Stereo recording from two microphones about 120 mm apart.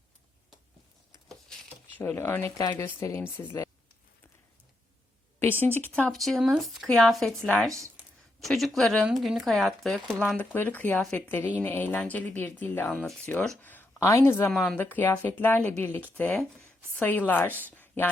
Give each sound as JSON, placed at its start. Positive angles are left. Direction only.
{"t": 2.0, "sound": "speech", "side_deg": 20}
{"t": 2.6, "sound": "speech", "side_deg": 30}
{"t": 5.4, "sound": "speech", "side_deg": 15}
{"t": 6.1, "sound": "speech", "side_deg": 0}
{"t": 10.3, "sound": "speech", "side_deg": 15}
{"t": 14.5, "sound": "speech", "side_deg": 0}
{"t": 14.8, "sound": "speech", "side_deg": 15}